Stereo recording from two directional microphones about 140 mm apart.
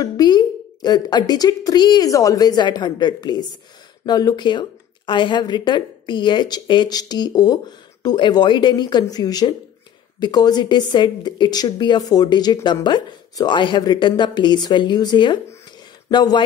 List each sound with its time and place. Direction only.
0.0 s a woman's voice: 30° left (ahead or behind)